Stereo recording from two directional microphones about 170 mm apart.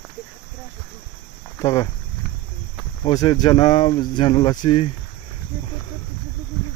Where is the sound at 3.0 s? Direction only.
25° left (ahead or behind).